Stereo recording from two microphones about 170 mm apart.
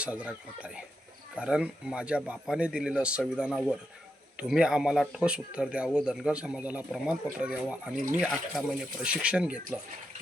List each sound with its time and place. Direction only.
0.0 s speech: 5° right (ahead or behind)
7.9 s speech: 50° right (ahead or behind)
8.2 s speech: 5° right (ahead or behind)